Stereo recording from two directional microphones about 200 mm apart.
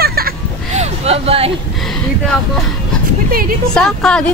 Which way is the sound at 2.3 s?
5° left (ahead or behind).